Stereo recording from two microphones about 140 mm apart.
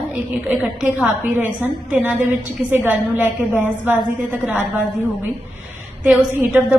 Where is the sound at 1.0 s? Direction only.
15° right (ahead or behind).